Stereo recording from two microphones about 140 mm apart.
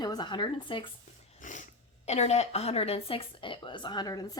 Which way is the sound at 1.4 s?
65° left (ahead or behind).